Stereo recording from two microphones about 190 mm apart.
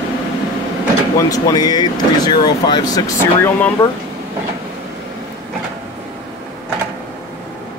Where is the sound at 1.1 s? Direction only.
20° left (ahead or behind).